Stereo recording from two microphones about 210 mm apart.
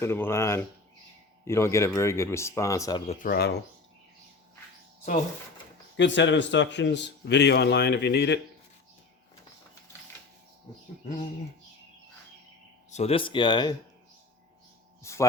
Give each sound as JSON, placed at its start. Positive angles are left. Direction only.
{"t": 0.0, "sound": "speech", "side_deg": 10}
{"t": 3.1, "sound": "speech", "side_deg": 40}
{"t": 6.0, "sound": "speech", "side_deg": 60}
{"t": 12.9, "sound": "speech", "side_deg": 30}
{"t": 15.0, "sound": "speech", "side_deg": 15}